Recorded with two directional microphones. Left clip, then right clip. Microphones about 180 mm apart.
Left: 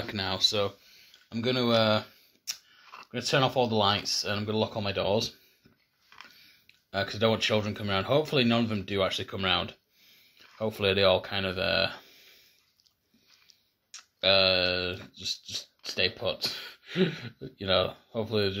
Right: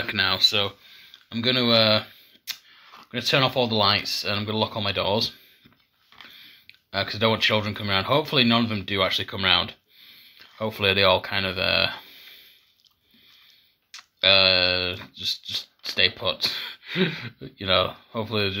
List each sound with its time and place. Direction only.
0.0 s speech: 20° left (ahead or behind)
13.9 s speech: 5° left (ahead or behind)